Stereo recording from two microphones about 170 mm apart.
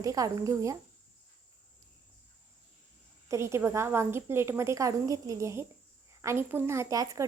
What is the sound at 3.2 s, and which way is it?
A woman's voice, 15° right (ahead or behind).